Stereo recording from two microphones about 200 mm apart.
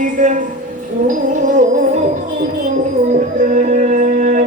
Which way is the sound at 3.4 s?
35° right (ahead or behind).